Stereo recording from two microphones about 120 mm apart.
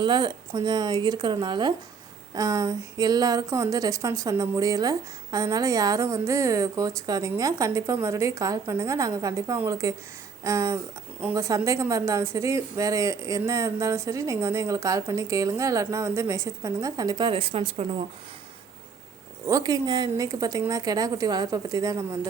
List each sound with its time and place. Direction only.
0.0 s a woman's voice: 40° right (ahead or behind)
19.5 s a woman's voice: 30° right (ahead or behind)